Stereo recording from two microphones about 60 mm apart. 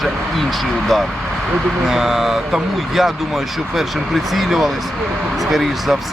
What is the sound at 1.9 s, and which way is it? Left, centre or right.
Speech, centre.